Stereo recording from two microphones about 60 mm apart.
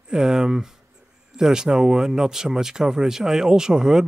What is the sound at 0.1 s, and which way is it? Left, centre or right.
Speech, centre.